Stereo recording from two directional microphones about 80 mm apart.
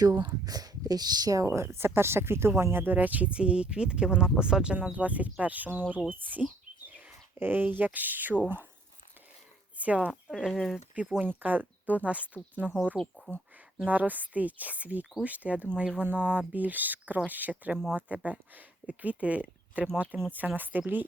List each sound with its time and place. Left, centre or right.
0.0 s speech: right
1.5 s speech: right
6.1 s a sound: right
7.3 s speech: right
9.7 s speech: centre
10.3 s speech: centre
11.2 s speech: right
13.0 s speech: centre
13.8 s speech: centre